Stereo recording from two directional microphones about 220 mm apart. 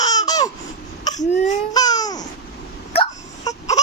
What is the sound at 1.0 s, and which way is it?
Cough, 15° left (ahead or behind).